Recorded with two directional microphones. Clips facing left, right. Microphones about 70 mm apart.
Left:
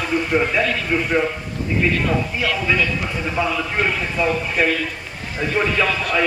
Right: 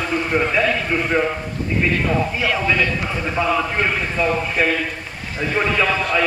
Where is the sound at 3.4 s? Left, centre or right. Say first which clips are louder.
Right 2 dB; centre.